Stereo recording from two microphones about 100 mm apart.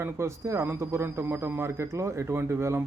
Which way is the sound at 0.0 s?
30° right (ahead or behind).